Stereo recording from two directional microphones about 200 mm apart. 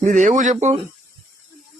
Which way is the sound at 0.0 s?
35° right (ahead or behind).